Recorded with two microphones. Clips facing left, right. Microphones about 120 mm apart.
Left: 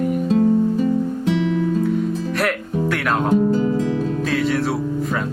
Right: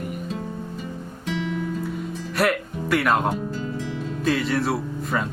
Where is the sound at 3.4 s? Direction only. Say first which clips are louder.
Left 12 dB; 55° left (ahead or behind).